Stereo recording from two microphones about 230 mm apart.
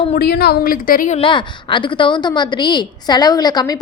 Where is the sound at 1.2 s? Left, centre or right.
Left.